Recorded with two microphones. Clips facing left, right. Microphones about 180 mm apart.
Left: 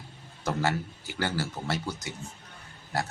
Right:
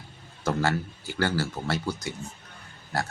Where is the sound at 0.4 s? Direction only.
15° left (ahead or behind).